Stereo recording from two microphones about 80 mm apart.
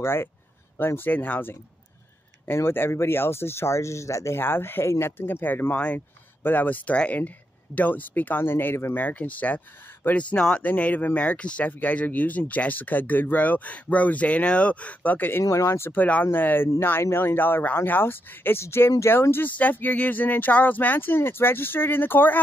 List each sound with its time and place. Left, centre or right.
0.0 s speech: left
15.4 s speech: left
15.9 s speech: left